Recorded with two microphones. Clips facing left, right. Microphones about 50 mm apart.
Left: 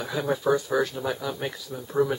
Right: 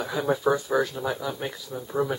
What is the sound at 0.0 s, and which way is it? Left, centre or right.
Speech, centre.